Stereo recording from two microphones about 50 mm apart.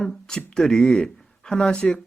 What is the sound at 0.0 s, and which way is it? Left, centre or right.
Speech, centre.